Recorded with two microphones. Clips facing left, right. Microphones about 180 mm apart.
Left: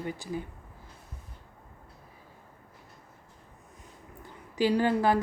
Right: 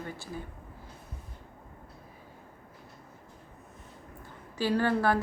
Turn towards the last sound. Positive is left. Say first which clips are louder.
# left 2 dB
turn(degrees=15)  # may be behind; listen again after turning